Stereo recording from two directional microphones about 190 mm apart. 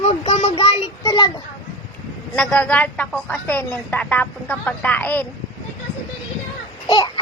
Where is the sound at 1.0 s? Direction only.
20° left (ahead or behind).